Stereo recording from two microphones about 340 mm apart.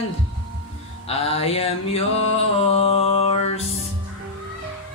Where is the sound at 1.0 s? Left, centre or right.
Centre.